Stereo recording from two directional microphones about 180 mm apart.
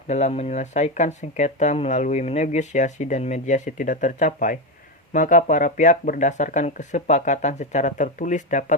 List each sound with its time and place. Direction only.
0.1 s speech: 40° left (ahead or behind)